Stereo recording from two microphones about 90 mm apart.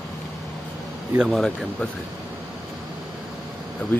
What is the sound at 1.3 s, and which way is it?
Speech, 10° left (ahead or behind).